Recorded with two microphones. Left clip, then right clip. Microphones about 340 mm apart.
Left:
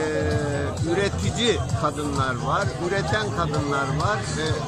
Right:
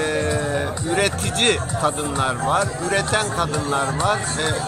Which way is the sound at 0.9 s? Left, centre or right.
Centre.